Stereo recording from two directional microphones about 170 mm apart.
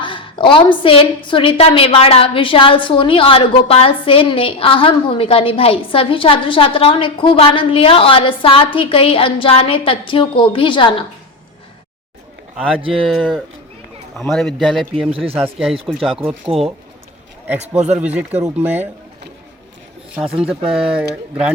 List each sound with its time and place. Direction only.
0.0 s a woman's voice: 30° left (ahead or behind)
12.9 s speech: centre (ahead or behind)
15.1 s speech: 35° right (ahead or behind)
15.9 s speech: centre (ahead or behind)
16.5 s speech: 35° right (ahead or behind)
17.9 s speech: 10° right (ahead or behind)